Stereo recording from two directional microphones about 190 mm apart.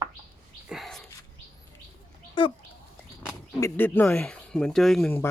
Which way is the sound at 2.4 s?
25° left (ahead or behind).